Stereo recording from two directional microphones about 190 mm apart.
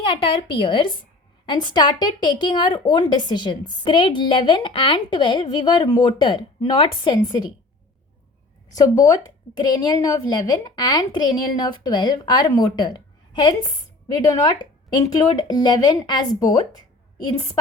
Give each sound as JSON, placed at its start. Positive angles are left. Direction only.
{"t": 0.6, "sound": "speech", "side_deg": 25}
{"t": 8.7, "sound": "speech", "side_deg": 20}
{"t": 14.9, "sound": "speech", "side_deg": 20}